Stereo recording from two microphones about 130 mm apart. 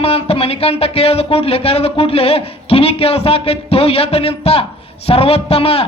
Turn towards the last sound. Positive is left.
turn(degrees=50)  # may be behind; listen again after turning